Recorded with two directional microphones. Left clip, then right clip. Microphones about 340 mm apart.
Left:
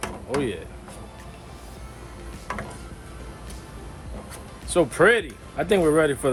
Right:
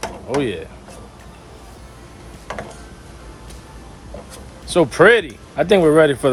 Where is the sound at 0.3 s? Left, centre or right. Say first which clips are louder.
Right 6 dB; right.